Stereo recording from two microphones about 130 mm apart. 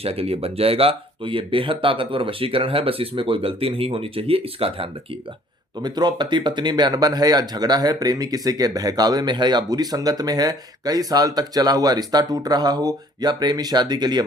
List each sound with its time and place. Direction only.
0.0 s speech: 50° right (ahead or behind)
5.8 s speech: 35° right (ahead or behind)